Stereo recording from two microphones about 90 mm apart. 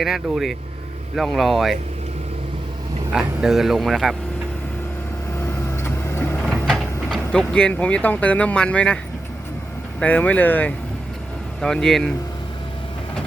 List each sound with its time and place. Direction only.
0.0 s speech: centre (ahead or behind)
3.1 s speech: 5° right (ahead or behind)
5.4 s vehicle: 25° left (ahead or behind)
6.4 s a sound: centre (ahead or behind)
7.3 s speech: 10° left (ahead or behind)
10.0 s speech: 15° left (ahead or behind)
11.6 s speech: 5° left (ahead or behind)